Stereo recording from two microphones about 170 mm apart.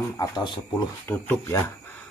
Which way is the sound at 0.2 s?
25° left (ahead or behind).